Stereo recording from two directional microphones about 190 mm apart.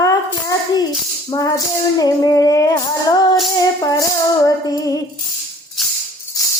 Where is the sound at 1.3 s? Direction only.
20° left (ahead or behind).